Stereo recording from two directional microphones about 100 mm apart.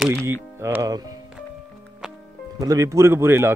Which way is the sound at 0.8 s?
40° right (ahead or behind).